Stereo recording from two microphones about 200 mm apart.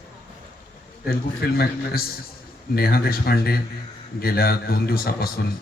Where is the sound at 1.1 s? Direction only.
50° left (ahead or behind).